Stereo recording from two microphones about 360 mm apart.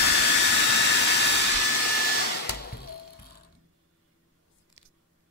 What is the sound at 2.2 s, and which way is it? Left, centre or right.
Hair dryer, left.